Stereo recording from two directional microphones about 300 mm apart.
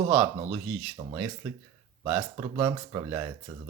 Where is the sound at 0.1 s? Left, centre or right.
Centre.